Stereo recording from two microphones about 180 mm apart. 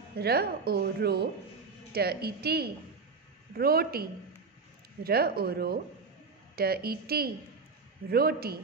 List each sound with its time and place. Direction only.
0.2 s a woman's voice: 60° right (ahead or behind)